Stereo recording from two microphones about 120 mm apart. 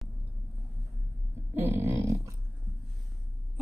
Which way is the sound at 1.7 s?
20° right (ahead or behind).